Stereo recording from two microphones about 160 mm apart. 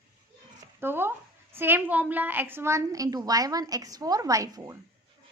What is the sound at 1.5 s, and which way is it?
A woman's voice, 10° right (ahead or behind).